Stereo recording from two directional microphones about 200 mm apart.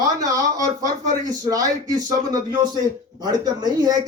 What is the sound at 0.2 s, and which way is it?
A man's voice, 15° right (ahead or behind).